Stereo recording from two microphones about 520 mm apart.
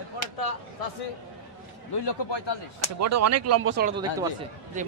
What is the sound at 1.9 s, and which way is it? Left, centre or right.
Speech, left.